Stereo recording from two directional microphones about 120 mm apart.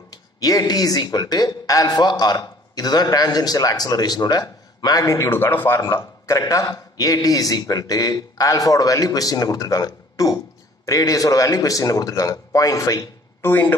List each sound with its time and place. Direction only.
0.1 s a man's voice: 30° left (ahead or behind); by 13.7 s 15° left (ahead or behind)